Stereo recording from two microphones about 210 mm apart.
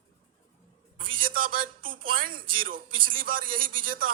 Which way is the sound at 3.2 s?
40° right (ahead or behind).